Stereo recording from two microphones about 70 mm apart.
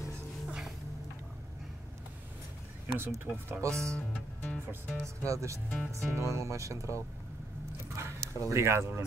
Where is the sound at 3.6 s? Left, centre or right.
Right.